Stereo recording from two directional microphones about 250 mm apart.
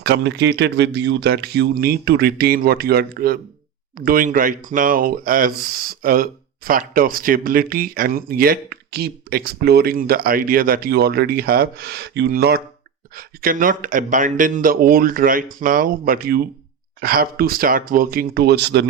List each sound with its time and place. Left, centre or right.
0.0 s speech: right